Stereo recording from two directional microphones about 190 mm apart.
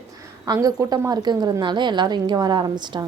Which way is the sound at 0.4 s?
20° right (ahead or behind).